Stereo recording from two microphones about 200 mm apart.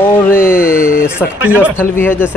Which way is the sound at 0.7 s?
45° left (ahead or behind).